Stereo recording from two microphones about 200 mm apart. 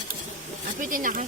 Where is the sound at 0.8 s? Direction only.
40° right (ahead or behind).